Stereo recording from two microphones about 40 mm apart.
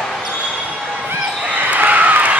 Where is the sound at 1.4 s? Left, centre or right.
Right.